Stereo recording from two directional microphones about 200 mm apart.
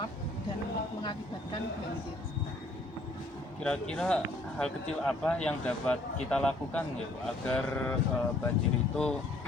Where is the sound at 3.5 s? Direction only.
5° left (ahead or behind).